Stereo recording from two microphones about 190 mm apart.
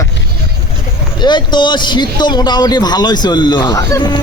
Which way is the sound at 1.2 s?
25° left (ahead or behind).